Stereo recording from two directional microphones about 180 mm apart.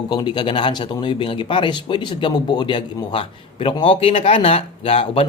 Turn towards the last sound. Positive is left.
turn(degrees=30)  # may be behind; listen again after turning